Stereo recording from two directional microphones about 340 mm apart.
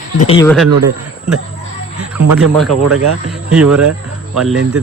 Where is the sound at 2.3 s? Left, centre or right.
Centre.